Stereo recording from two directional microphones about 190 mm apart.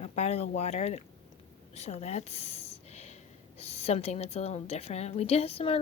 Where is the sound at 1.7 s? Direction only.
35° left (ahead or behind).